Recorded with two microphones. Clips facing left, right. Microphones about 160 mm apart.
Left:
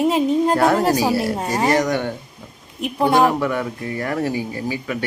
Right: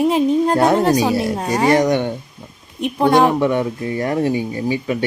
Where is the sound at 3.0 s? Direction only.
5° left (ahead or behind).